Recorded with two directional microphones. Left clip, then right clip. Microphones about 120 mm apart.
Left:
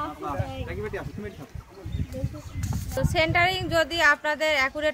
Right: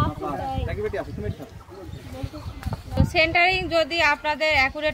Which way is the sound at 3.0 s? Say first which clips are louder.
Right 3 dB; 40° left (ahead or behind).